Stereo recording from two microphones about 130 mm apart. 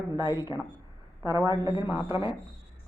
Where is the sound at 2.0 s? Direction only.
40° left (ahead or behind).